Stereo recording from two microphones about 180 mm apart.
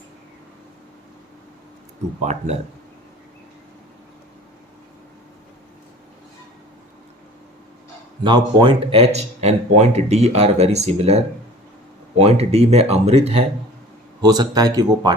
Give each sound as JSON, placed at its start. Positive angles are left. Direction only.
{"t": 2.3, "sound": "speech", "side_deg": -35}
{"t": 8.2, "sound": "speech", "side_deg": -25}
{"t": 14.2, "sound": "speech", "side_deg": -20}